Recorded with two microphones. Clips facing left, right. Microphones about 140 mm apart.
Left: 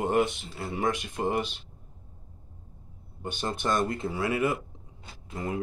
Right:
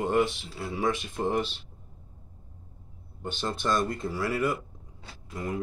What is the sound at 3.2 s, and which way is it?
Speech, 15° left (ahead or behind).